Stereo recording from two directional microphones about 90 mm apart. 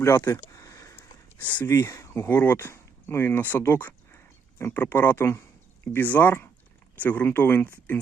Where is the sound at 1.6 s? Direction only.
35° left (ahead or behind).